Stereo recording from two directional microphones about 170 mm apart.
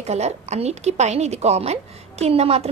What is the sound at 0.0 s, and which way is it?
A woman's voice, 40° right (ahead or behind).